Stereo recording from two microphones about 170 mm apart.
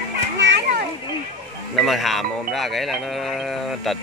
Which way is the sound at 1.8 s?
Centre (ahead or behind).